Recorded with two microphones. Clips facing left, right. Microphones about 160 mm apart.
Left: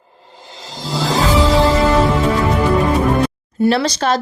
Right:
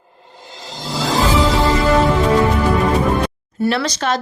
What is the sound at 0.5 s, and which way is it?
Music, centre (ahead or behind).